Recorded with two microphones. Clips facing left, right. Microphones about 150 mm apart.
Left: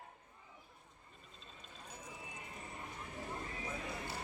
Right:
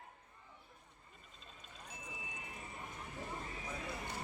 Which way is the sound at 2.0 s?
10° right (ahead or behind).